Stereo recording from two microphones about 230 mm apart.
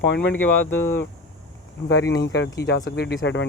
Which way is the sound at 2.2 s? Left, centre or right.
Left.